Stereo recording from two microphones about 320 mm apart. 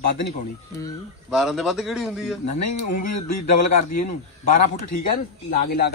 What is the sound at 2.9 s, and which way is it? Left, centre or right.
Speech, left.